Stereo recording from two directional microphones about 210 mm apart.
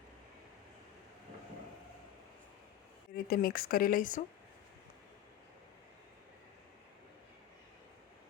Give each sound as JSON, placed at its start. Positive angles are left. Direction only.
{"t": 3.2, "sound": "speech", "side_deg": 45}